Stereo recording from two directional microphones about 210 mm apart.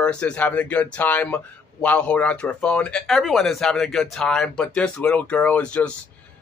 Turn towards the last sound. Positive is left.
turn(degrees=5)  # may be behind; listen again after turning